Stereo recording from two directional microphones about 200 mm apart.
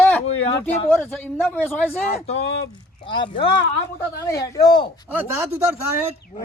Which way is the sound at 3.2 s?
25° left (ahead or behind).